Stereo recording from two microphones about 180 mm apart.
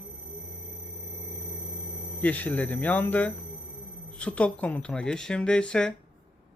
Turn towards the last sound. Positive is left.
turn(degrees=5)  # may be behind; listen again after turning